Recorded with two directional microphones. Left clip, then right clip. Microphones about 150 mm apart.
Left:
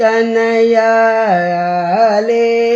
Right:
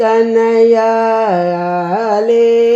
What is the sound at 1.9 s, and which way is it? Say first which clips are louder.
Mantra: even; 35° right (ahead or behind).